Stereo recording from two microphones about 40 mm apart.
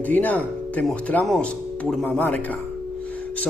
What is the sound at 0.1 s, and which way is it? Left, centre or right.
Speech, left.